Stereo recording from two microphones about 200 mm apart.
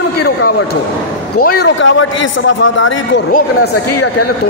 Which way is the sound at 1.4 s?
50° left (ahead or behind).